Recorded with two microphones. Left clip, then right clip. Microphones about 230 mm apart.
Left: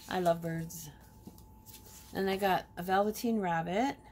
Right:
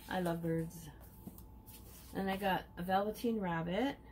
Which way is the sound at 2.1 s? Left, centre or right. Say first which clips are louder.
Left 6 dB; left.